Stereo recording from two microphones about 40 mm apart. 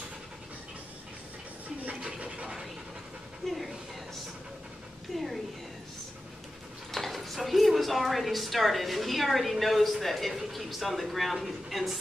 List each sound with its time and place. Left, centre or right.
2.0 s speech: right
3.4 s speech: centre
6.9 s speech: centre